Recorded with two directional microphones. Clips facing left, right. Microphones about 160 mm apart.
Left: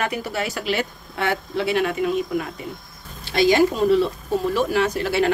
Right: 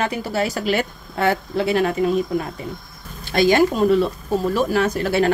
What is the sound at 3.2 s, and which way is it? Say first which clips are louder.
Speech: right 1 dB; 50° right (ahead or behind).